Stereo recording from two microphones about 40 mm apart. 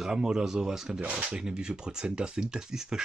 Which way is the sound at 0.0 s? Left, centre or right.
Centre.